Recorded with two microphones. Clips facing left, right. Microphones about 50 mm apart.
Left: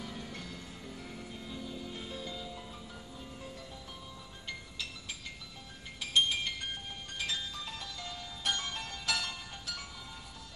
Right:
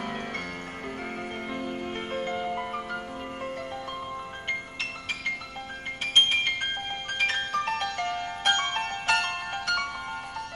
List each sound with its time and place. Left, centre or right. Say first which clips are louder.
1.5 s music: right 8 dB; right
4.5 s music: right 10 dB; right